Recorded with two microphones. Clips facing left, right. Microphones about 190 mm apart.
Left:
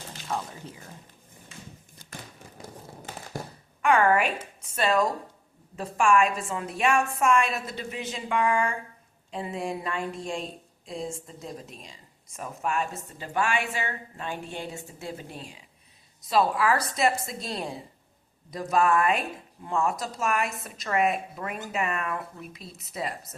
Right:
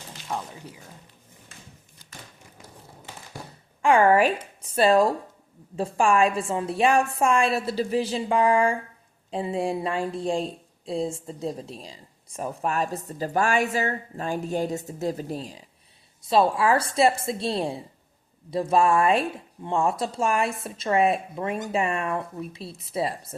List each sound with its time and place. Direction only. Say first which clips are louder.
0.3 s speech: even; 10° right (ahead or behind)
3.8 s speech: right 4 dB; 30° right (ahead or behind)